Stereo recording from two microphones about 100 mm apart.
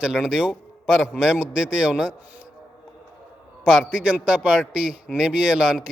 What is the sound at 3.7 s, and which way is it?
A man's voice, 5° right (ahead or behind).